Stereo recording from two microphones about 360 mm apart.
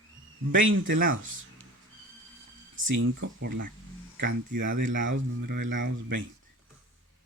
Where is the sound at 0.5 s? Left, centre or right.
Right.